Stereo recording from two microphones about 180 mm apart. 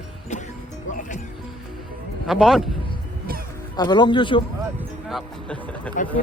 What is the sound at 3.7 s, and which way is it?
Speech, 25° left (ahead or behind).